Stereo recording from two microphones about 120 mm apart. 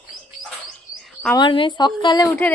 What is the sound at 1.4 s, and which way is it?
Speech, 45° left (ahead or behind).